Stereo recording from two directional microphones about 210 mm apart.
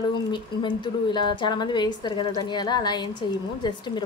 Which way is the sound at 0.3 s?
20° left (ahead or behind).